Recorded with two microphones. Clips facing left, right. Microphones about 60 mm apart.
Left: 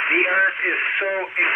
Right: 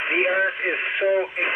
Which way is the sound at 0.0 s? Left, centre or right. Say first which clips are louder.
Left 3 dB; left.